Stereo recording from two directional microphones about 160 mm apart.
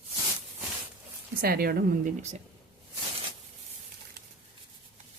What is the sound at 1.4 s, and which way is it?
Speech, 70° right (ahead or behind).